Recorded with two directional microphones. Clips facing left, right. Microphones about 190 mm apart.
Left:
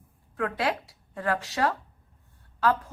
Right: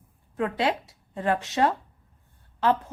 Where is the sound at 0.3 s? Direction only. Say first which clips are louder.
Right 2 dB; 20° right (ahead or behind).